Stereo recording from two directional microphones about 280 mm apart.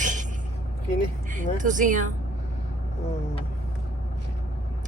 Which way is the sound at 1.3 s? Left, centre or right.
Right.